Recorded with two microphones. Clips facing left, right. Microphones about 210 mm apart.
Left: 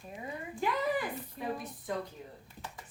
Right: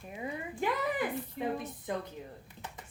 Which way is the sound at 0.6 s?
20° right (ahead or behind).